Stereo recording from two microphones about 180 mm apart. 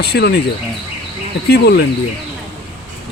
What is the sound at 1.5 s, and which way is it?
Speech, 65° left (ahead or behind).